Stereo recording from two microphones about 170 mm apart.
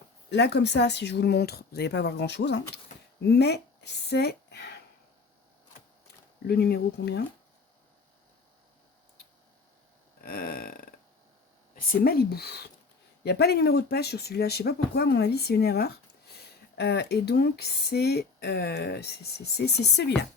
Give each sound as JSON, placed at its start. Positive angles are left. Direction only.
{"t": 0.3, "sound": "speech", "side_deg": 90}
{"t": 3.2, "sound": "speech", "side_deg": 75}
{"t": 6.5, "sound": "speech", "side_deg": 70}
{"t": 10.2, "sound": "speech", "side_deg": 60}